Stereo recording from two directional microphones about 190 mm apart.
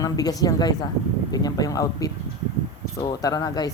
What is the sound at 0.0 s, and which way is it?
Speech, 20° left (ahead or behind).